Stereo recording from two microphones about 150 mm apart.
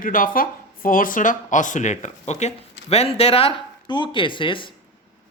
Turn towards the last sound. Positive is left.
turn(degrees=35)  # may be behind; listen again after turning